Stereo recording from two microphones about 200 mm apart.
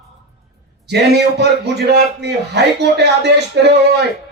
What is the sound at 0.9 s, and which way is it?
A man's voice, 55° right (ahead or behind).